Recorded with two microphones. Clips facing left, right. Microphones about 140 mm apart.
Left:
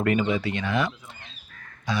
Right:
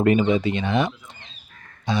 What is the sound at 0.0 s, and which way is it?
Speech, 25° right (ahead or behind).